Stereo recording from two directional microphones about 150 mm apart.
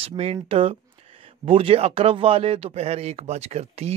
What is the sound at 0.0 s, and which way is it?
Speech, 40° right (ahead or behind).